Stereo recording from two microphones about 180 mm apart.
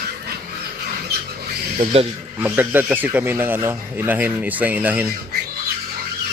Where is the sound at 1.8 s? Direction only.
35° right (ahead or behind).